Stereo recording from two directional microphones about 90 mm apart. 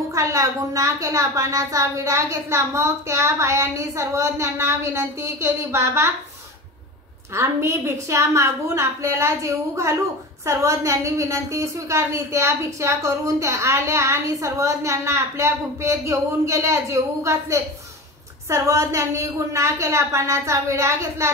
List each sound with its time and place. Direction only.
0.1 s a woman's voice: 35° right (ahead or behind)
7.3 s a woman's voice: 30° right (ahead or behind)